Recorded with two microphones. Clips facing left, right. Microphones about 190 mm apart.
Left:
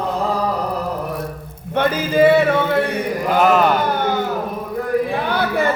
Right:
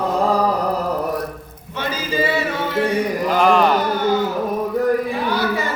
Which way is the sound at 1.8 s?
55° left (ahead or behind).